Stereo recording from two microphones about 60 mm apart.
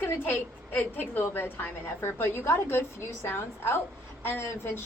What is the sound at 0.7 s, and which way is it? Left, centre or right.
A woman's voice, left.